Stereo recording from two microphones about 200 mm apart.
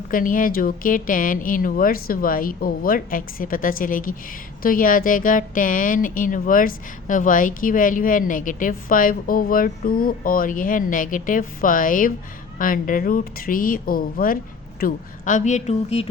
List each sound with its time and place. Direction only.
0.1 s a woman's voice: 45° left (ahead or behind)